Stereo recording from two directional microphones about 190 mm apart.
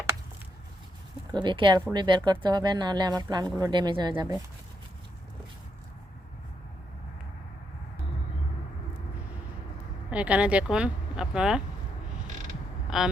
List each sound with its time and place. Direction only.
1.3 s speech: 25° right (ahead or behind)
10.1 s speech: 5° right (ahead or behind)
12.9 s speech: centre (ahead or behind)